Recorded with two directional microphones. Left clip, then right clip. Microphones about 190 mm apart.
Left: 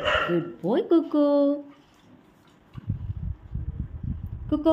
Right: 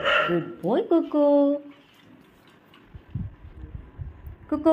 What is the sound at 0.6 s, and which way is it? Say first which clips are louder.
Speech: even; 20° left (ahead or behind).